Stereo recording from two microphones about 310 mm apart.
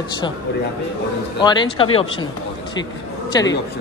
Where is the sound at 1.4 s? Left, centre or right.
Centre.